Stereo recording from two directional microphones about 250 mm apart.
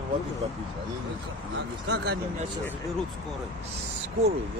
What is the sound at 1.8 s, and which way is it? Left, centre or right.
Speech, right.